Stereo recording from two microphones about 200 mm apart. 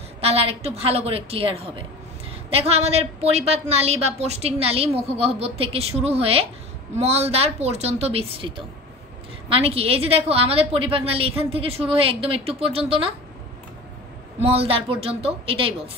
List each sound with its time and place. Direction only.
0.2 s a woman's voice: 30° right (ahead or behind)
14.4 s a woman's voice: 30° right (ahead or behind)